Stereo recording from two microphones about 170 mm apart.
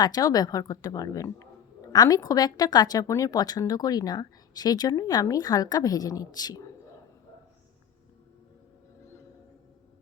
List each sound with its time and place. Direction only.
0.0 s a woman's voice: 20° left (ahead or behind)